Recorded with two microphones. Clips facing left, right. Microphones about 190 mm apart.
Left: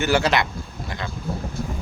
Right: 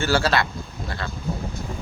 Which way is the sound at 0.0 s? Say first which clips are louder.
Left 1 dB; 20° left (ahead or behind).